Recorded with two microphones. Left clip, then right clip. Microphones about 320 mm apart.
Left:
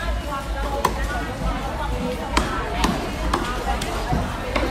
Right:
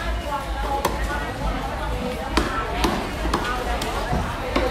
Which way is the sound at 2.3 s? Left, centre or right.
Left.